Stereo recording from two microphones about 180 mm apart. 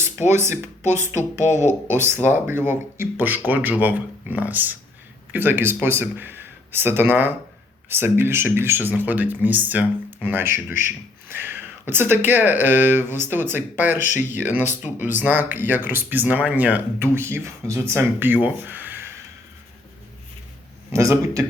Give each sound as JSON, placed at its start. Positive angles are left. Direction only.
{"t": 0.0, "sound": "speech", "side_deg": -15}
{"t": 0.9, "sound": "speech", "side_deg": 40}
{"t": 1.9, "sound": "speech", "side_deg": -15}
{"t": 14.1, "sound": "speech", "side_deg": 45}
{"t": 14.9, "sound": "speech", "side_deg": -10}
{"t": 20.9, "sound": "speech", "side_deg": -15}